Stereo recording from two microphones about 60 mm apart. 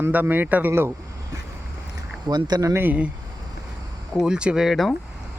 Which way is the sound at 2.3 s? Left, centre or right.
Right.